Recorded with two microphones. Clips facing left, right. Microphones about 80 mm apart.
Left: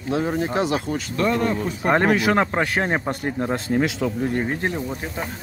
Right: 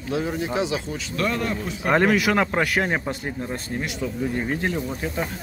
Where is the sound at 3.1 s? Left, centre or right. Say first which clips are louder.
Left 5 dB; left.